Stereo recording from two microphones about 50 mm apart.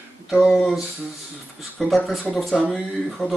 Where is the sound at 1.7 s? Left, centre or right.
Centre.